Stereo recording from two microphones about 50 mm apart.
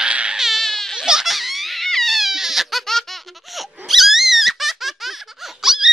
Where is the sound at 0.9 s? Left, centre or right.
Centre.